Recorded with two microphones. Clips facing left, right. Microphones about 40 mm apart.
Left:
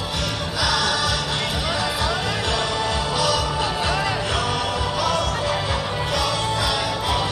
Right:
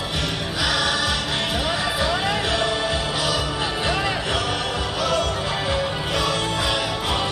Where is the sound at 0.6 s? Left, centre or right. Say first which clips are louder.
Left 1 dB; right.